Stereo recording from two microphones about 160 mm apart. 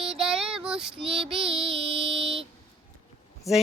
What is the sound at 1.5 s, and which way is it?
Music, 35° right (ahead or behind).